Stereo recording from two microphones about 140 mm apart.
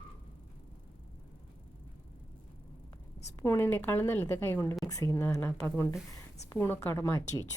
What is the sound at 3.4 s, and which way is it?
A woman's voice, 15° left (ahead or behind).